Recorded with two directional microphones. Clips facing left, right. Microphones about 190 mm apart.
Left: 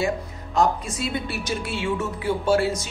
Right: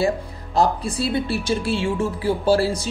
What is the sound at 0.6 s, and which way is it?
Speech, 35° right (ahead or behind).